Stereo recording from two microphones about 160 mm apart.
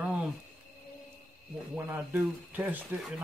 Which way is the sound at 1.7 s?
10° right (ahead or behind).